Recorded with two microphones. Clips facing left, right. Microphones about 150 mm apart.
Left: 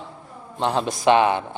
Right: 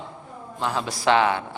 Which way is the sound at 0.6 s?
25° left (ahead or behind).